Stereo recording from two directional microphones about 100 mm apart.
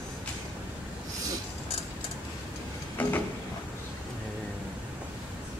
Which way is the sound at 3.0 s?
15° left (ahead or behind).